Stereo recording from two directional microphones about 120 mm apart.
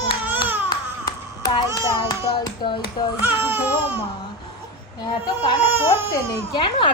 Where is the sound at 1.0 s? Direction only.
35° left (ahead or behind).